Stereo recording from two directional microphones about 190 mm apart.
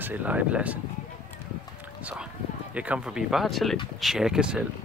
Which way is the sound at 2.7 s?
5° right (ahead or behind).